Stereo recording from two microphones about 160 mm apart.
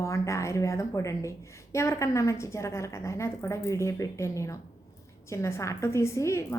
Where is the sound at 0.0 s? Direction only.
20° left (ahead or behind).